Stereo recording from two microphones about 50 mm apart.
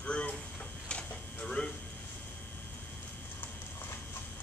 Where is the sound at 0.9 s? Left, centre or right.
Left.